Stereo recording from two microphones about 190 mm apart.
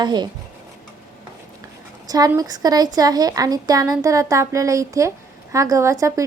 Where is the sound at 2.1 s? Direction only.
20° right (ahead or behind).